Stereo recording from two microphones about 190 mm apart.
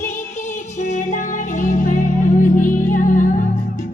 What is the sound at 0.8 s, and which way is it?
Music, 40° left (ahead or behind).